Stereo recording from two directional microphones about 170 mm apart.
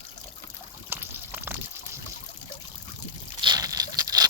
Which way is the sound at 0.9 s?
10° right (ahead or behind).